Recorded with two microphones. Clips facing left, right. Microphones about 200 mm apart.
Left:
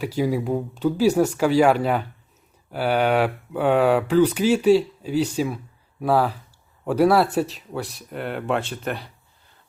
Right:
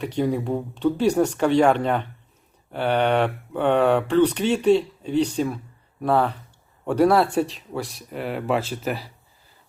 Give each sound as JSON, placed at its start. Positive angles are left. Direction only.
{"t": 0.0, "sound": "speech", "side_deg": 5}